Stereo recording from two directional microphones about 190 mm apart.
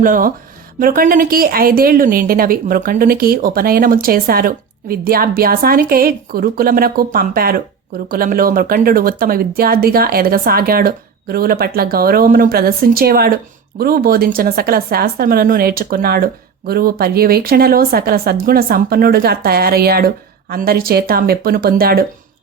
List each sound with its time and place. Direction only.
0.0 s speech: 45° right (ahead or behind)